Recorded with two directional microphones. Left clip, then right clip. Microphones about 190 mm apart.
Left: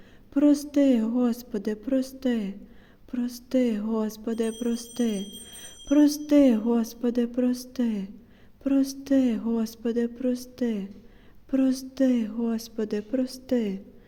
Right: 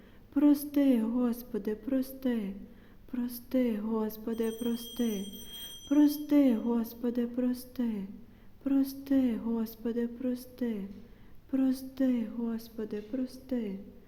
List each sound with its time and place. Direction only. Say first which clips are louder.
0.3 s speech: left 5 dB; 20° left (ahead or behind)